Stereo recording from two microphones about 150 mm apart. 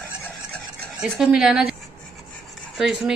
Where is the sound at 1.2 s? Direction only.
5° right (ahead or behind).